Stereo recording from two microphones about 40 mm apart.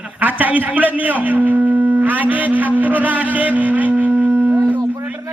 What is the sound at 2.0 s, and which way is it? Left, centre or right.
Music, right.